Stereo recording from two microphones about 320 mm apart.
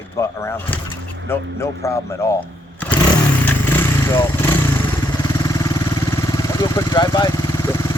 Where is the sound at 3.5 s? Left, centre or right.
Centre.